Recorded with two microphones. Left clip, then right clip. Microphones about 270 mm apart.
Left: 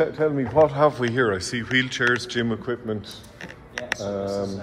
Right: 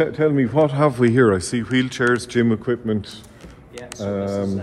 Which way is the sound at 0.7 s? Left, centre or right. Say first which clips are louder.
Right 3 dB; right.